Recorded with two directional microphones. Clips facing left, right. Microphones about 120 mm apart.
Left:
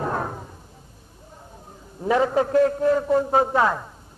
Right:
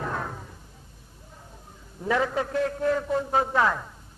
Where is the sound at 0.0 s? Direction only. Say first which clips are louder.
Left 5 dB; 35° left (ahead or behind).